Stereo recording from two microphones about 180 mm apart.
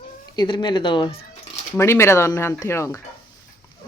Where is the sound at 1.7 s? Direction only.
15° left (ahead or behind).